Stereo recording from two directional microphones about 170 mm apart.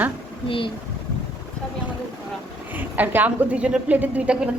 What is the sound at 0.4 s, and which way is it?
Speech, 30° left (ahead or behind).